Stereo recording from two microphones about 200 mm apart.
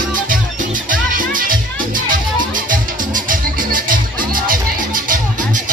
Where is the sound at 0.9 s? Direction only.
45° right (ahead or behind).